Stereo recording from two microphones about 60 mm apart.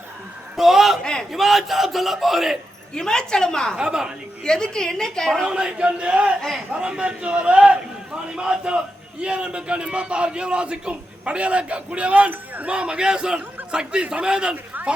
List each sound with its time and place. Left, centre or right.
0.5 s a man's voice: centre
2.9 s a woman's voice: centre
3.8 s a man's voice: centre
4.4 s a woman's voice: centre
5.5 s a man's voice: centre
12.7 s a man's voice: centre